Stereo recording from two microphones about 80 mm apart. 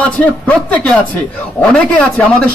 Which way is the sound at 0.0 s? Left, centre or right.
Centre.